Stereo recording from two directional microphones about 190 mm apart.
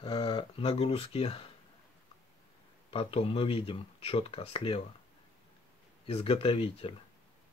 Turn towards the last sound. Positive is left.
turn(degrees=30)  # may be behind; listen again after turning